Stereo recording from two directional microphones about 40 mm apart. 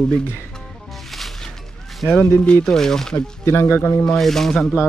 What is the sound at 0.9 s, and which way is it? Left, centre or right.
Music, centre.